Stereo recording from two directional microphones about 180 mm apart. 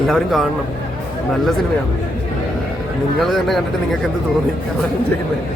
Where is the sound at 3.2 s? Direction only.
Centre (ahead or behind).